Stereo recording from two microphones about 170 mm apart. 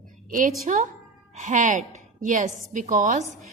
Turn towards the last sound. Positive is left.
turn(degrees=-45)  # may be behind; listen again after turning